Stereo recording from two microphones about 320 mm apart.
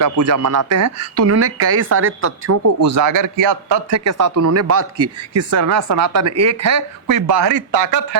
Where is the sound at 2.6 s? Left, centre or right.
Right.